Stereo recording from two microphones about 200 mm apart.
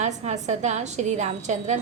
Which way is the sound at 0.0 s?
35° right (ahead or behind).